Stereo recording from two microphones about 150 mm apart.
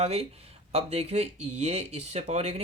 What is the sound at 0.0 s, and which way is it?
Speech, 45° right (ahead or behind).